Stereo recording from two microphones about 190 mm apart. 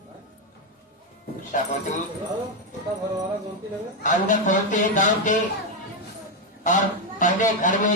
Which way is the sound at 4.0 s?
40° left (ahead or behind).